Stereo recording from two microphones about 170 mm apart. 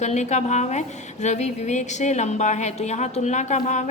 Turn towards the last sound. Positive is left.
turn(degrees=45)  # may be behind; listen again after turning